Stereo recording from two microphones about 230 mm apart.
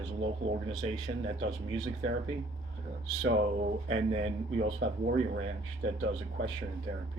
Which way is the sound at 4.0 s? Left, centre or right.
Right.